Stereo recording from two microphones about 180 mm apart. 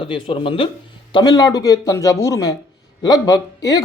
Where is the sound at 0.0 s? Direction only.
30° left (ahead or behind).